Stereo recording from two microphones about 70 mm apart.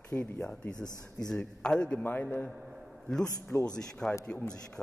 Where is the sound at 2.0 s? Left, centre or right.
Left.